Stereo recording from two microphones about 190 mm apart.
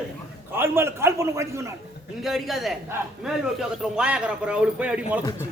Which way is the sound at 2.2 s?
Centre (ahead or behind).